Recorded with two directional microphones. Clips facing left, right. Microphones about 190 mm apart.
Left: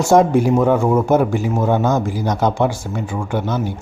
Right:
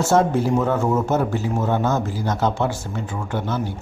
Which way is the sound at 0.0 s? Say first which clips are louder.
Left 5 dB; 15° left (ahead or behind).